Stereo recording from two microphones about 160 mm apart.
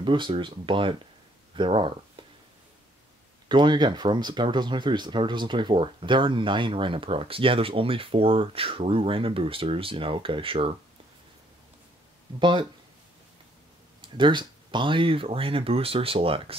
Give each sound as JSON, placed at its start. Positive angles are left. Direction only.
{"t": 0.0, "sound": "speech", "side_deg": -30}
{"t": 3.4, "sound": "speech", "side_deg": -30}
{"t": 12.4, "sound": "speech", "side_deg": -30}
{"t": 14.0, "sound": "speech", "side_deg": -30}